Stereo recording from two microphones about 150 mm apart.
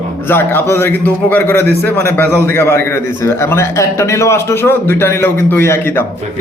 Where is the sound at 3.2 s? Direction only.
15° left (ahead or behind).